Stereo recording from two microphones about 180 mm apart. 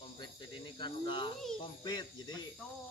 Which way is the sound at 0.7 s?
25° left (ahead or behind).